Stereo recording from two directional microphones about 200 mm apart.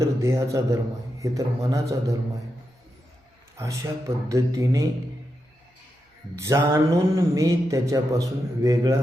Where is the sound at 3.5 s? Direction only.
15° right (ahead or behind).